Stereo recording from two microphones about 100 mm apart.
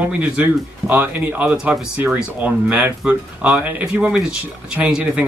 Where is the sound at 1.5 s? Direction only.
5° right (ahead or behind).